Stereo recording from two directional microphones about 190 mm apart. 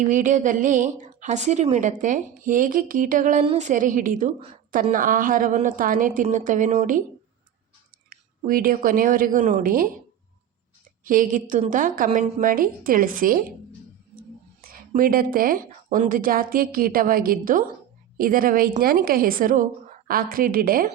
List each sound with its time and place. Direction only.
0.1 s a woman's voice: 45° right (ahead or behind)
8.1 s a woman's voice: 50° right (ahead or behind)
11.0 s a woman's voice: 45° right (ahead or behind)
14.6 s a woman's voice: 50° right (ahead or behind)